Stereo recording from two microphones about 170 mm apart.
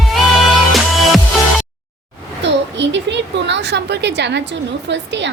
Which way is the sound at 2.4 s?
90° right.